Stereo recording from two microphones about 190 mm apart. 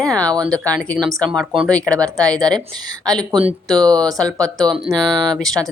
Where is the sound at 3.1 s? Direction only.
20° right (ahead or behind).